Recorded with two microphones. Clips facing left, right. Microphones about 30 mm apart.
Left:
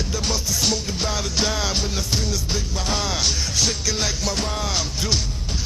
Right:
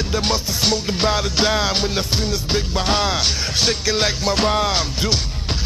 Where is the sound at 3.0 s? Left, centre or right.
Right.